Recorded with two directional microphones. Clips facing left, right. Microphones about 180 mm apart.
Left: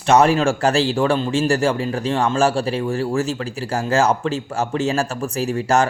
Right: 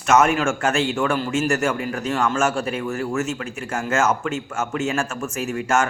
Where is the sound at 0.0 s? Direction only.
30° left (ahead or behind).